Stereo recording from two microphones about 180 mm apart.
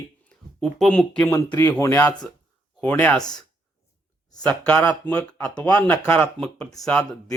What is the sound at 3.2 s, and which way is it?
Speech, 20° left (ahead or behind).